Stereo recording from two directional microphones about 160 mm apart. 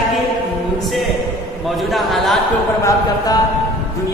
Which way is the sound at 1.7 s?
Centre (ahead or behind).